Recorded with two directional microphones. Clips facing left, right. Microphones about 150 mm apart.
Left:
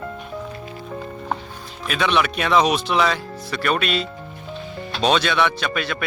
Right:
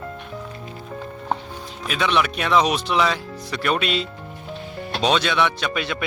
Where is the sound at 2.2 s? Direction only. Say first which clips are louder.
Left 1 dB; 5° left (ahead or behind).